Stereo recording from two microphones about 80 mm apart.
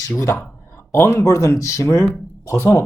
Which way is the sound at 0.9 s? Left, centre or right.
Left.